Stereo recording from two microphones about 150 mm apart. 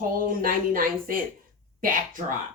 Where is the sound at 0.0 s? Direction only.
70° right (ahead or behind).